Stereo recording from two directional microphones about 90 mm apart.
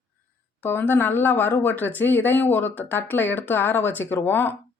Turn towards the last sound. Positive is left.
turn(degrees=25)  # may be behind; listen again after turning